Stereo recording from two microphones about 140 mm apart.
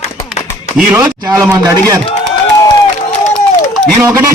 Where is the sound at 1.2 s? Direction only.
25° right (ahead or behind).